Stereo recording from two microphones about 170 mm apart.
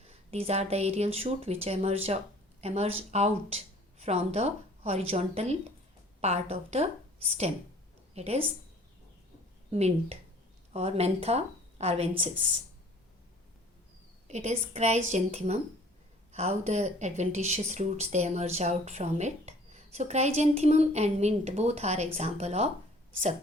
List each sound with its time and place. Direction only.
0.0 s speech: 35° right (ahead or behind)
9.7 s speech: 40° right (ahead or behind)
14.3 s speech: 45° right (ahead or behind)